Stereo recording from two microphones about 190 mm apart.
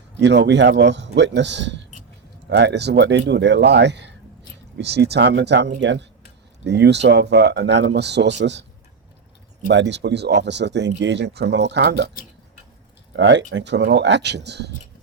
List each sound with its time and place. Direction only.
0.2 s speech: 65° right (ahead or behind)
9.6 s speech: 65° right (ahead or behind)
13.1 s speech: 70° right (ahead or behind)